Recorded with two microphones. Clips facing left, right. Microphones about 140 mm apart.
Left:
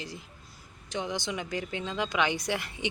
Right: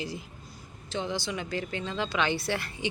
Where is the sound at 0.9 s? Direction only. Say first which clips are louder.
Right 1 dB; 15° left (ahead or behind).